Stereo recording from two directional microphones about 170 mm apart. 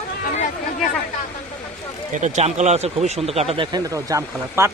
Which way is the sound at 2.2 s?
45° right (ahead or behind).